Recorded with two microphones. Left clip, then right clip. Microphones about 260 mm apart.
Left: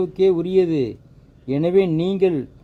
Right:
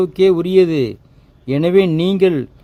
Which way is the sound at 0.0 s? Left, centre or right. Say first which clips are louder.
Right 4 dB; right.